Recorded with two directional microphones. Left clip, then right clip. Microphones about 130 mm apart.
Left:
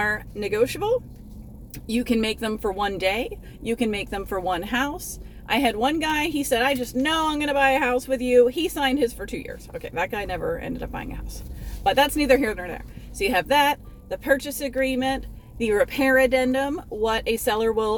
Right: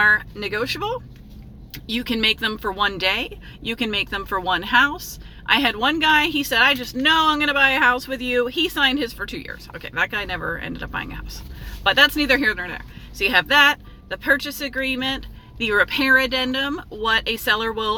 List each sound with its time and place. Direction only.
0.0 s speech: 30° left (ahead or behind)